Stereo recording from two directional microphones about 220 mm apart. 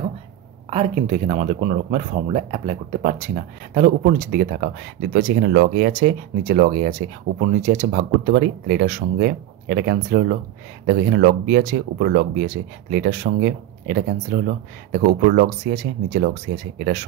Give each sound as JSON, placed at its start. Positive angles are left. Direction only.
{"t": 0.7, "sound": "speech", "side_deg": -30}